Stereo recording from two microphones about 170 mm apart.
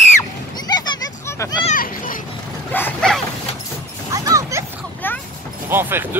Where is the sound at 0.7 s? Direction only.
25° left (ahead or behind).